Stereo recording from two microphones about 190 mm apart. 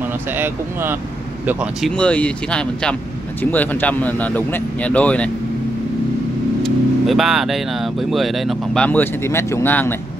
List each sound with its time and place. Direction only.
1.4 s speech: 5° right (ahead or behind)
6.6 s speech: centre (ahead or behind)